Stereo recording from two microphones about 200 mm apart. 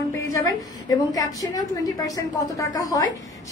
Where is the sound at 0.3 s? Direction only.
15° left (ahead or behind).